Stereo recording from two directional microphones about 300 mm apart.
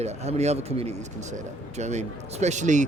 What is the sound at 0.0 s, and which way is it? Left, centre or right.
Speech, right.